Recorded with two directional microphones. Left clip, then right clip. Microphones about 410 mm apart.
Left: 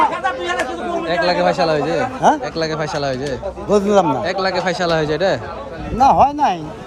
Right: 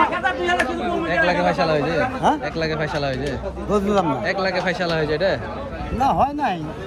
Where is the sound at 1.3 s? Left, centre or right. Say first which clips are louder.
Left 3 dB; centre.